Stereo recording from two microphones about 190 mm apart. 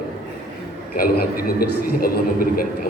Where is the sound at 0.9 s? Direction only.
50° left (ahead or behind).